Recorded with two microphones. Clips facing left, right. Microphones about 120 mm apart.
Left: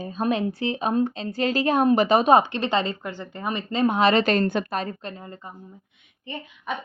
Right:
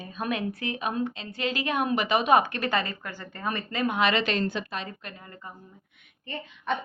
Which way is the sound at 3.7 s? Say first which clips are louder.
Left 6 dB; 30° left (ahead or behind).